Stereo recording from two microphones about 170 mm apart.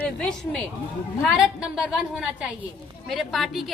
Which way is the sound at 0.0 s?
5° left (ahead or behind).